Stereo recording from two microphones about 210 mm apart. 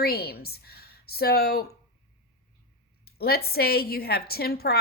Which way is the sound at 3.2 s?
45° left (ahead or behind).